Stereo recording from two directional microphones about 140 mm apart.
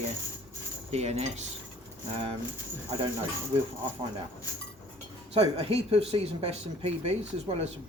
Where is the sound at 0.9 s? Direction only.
50° right (ahead or behind).